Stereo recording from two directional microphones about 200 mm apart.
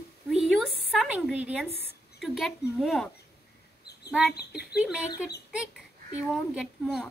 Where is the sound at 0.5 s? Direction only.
Centre (ahead or behind).